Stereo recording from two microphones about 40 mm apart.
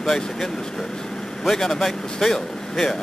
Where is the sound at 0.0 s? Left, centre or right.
Centre.